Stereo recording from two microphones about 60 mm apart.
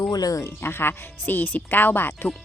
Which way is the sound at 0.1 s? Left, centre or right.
Left.